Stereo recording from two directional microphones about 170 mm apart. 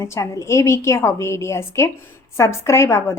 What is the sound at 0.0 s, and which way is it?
A woman's voice, 15° left (ahead or behind).